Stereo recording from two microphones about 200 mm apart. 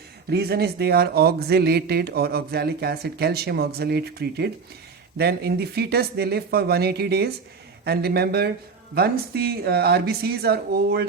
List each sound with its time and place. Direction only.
0.3 s speech: 55° right (ahead or behind)